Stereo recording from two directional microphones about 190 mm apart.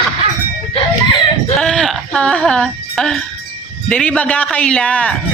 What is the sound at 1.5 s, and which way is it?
Music, 5° left (ahead or behind).